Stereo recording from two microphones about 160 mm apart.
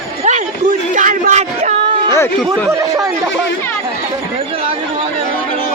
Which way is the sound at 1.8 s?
30° right (ahead or behind).